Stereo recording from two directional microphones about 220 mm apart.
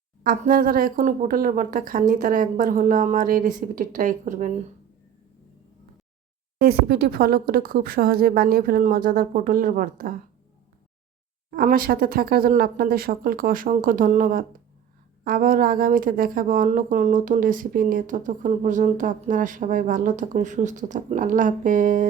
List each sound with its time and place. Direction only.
0.2 s speech: 40° right (ahead or behind)
6.6 s speech: 45° right (ahead or behind)
11.5 s speech: 40° right (ahead or behind)